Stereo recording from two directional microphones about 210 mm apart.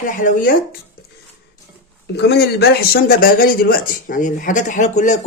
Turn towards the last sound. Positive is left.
turn(degrees=35)  # may be behind; listen again after turning